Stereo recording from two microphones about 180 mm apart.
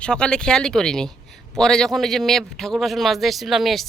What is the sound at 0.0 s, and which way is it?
A man's voice, 5° left (ahead or behind).